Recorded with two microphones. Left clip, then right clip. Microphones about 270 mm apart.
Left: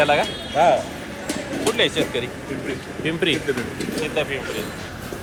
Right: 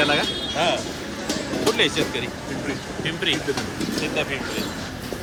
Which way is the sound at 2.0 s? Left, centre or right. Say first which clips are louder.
Left 1 dB; centre.